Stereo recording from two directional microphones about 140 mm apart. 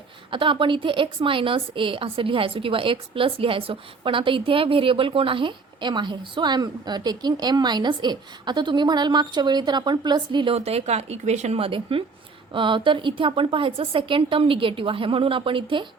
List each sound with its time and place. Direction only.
0.3 s a woman's voice: 35° right (ahead or behind)